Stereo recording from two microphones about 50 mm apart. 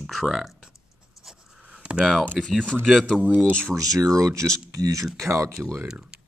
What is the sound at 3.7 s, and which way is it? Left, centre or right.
Speech, right.